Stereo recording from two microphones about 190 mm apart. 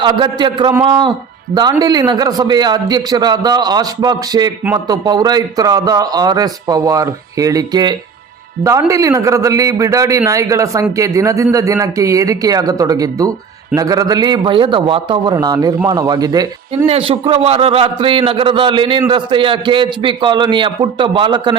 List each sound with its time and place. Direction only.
0.0 s a man's voice: 25° right (ahead or behind)
16.8 s a man's voice: 30° right (ahead or behind)